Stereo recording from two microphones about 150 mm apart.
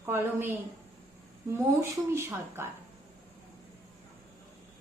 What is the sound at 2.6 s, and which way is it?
Speech, 15° right (ahead or behind).